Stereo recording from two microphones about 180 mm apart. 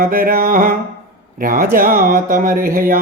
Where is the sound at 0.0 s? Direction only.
55° right (ahead or behind).